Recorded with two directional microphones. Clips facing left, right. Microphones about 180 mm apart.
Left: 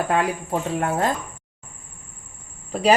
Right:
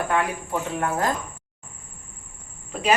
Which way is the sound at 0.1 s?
30° left (ahead or behind).